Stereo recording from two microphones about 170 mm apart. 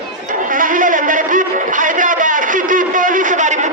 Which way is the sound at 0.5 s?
50° right (ahead or behind).